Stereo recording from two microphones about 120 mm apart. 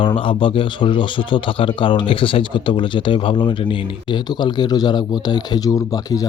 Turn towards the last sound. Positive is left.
turn(degrees=30)  # may be behind; listen again after turning